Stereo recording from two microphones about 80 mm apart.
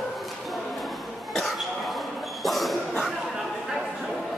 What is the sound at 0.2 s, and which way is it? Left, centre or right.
Cough, centre.